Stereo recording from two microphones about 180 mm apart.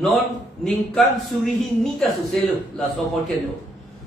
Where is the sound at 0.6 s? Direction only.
Centre (ahead or behind).